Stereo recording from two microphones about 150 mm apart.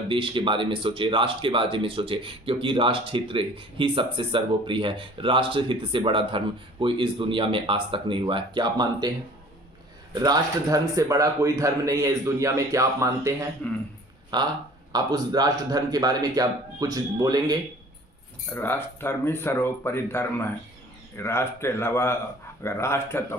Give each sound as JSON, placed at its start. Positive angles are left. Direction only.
{"t": 0.1, "sound": "speech", "side_deg": -35}
{"t": 10.1, "sound": "a man's voice", "side_deg": -25}
{"t": 13.6, "sound": "a man's voice", "side_deg": 10}
{"t": 14.3, "sound": "a man's voice", "side_deg": -30}
{"t": 18.5, "sound": "a man's voice", "side_deg": 15}